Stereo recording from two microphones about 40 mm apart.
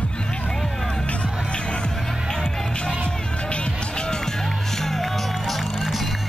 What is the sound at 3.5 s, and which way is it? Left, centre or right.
Run, left.